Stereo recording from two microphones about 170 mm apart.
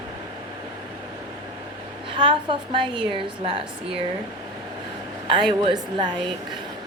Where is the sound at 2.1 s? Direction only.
30° right (ahead or behind).